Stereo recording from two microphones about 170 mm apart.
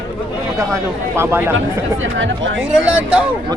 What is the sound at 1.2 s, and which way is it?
Speech, 15° right (ahead or behind).